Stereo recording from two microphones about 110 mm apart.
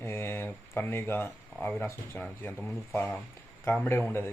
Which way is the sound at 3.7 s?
20° left (ahead or behind).